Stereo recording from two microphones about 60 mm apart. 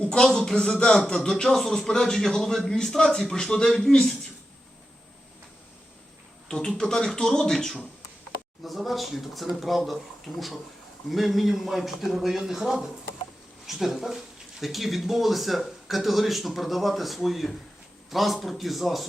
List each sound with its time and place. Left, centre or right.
0.0 s speech: centre
0.3 s speech: centre
6.5 s speech: centre